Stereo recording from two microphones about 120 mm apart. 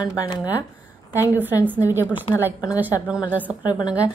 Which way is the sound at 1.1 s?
15° right (ahead or behind).